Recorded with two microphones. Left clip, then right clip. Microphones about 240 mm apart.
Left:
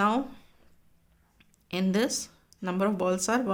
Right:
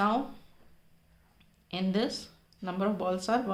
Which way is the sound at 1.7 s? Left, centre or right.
Left.